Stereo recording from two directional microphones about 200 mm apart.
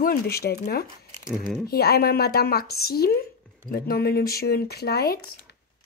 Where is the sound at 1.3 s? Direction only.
5° right (ahead or behind).